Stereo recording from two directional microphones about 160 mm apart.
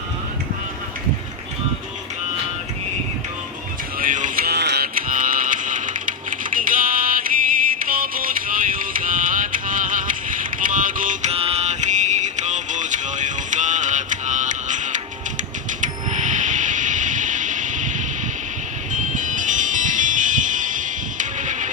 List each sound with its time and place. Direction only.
3.9 s music: 55° right (ahead or behind)
4.4 s music: 90° right; by 5.9 s 55° right (ahead or behind)
6.3 s typing: 60° right (ahead or behind)
7.9 s music: 60° right (ahead or behind)
11.3 s music: 40° right (ahead or behind)